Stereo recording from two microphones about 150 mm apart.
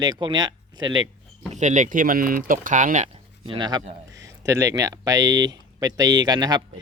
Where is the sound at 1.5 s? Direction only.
55° right (ahead or behind).